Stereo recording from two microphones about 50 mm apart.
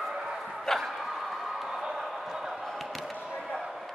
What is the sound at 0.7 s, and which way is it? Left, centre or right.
Bow-wow, centre.